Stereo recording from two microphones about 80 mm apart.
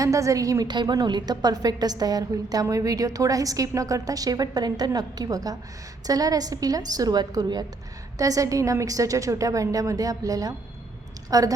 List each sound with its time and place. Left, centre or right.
0.0 s a woman's voice: right
0.7 s a woman's voice: right
8.2 s a woman's voice: right